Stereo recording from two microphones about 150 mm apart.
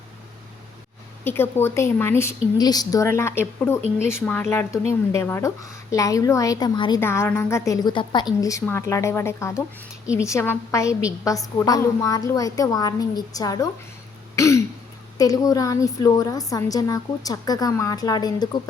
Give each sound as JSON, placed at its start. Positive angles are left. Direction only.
{"t": 1.2, "sound": "a woman's voice", "side_deg": 15}
{"t": 2.6, "sound": "a woman's voice", "side_deg": 25}
{"t": 7.0, "sound": "a woman's voice", "side_deg": 15}
{"t": 14.3, "sound": "throat clearing", "side_deg": 20}
{"t": 15.2, "sound": "a woman's voice", "side_deg": 25}